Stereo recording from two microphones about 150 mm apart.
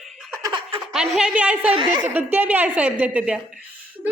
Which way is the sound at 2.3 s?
10° right (ahead or behind).